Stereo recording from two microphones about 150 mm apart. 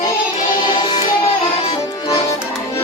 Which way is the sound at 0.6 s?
30° left (ahead or behind).